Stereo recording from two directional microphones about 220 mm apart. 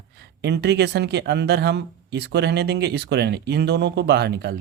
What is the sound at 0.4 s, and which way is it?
Speech, 50° right (ahead or behind).